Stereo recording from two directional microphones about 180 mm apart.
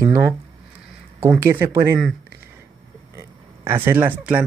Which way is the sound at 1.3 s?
10° right (ahead or behind).